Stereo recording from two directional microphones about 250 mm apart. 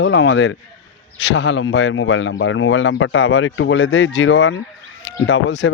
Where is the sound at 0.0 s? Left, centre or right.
Left.